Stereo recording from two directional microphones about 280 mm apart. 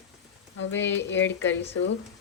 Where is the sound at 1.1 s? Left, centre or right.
Left.